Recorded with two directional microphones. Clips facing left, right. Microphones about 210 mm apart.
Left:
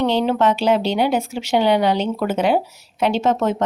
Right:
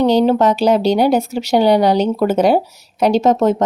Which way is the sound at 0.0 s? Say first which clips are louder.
Right 5 dB; 40° right (ahead or behind).